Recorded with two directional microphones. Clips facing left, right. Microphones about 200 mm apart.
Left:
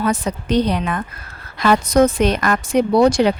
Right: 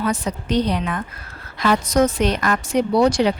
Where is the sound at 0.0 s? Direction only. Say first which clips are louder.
Left 3 dB; 55° left (ahead or behind).